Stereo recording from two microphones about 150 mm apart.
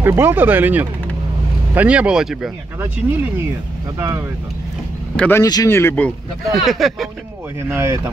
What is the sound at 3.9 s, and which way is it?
Speech, 15° right (ahead or behind).